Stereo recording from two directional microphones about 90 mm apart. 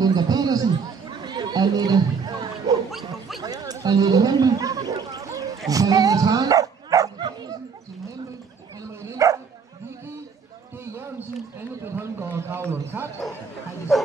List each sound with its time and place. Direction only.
0.0 s chatter: 45° right (ahead or behind)
1.2 s a sound: 50° right (ahead or behind)
2.9 s bow-wow: centre (ahead or behind)
3.4 s gargling: 45° right (ahead or behind)
5.7 s dog: 40° right (ahead or behind)
7.2 s bow-wow: 55° right (ahead or behind)
9.0 s dog: 35° right (ahead or behind)
11.8 s a sound: 30° right (ahead or behind)